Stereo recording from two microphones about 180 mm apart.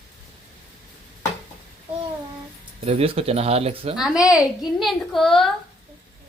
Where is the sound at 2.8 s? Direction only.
35° right (ahead or behind).